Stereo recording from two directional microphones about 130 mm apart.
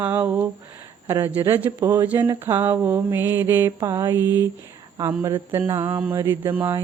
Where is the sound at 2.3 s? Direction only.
20° right (ahead or behind).